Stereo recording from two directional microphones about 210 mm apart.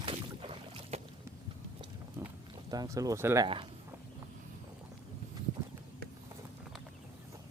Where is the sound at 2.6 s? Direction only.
15° right (ahead or behind).